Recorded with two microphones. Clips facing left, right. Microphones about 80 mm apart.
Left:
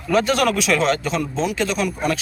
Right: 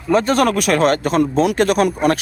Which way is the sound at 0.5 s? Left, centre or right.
Right.